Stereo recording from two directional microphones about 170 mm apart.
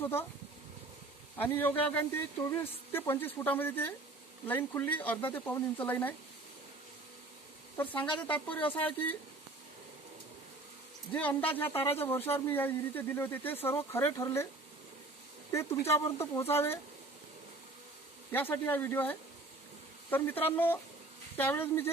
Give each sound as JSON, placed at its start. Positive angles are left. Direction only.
{"t": 0.0, "sound": "speech", "side_deg": 15}
{"t": 1.4, "sound": "speech", "side_deg": 10}
{"t": 7.8, "sound": "speech", "side_deg": 10}
{"t": 8.9, "sound": "speech", "side_deg": 30}
{"t": 11.1, "sound": "speech", "side_deg": 10}
{"t": 15.5, "sound": "speech", "side_deg": 15}
{"t": 18.3, "sound": "speech", "side_deg": 10}
{"t": 20.4, "sound": "speech", "side_deg": 10}